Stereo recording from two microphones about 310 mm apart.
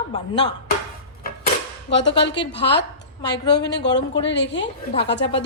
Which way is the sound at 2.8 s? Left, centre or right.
Left.